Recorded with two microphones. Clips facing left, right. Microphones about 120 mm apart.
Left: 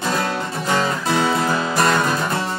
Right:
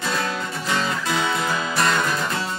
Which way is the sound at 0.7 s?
40° left (ahead or behind).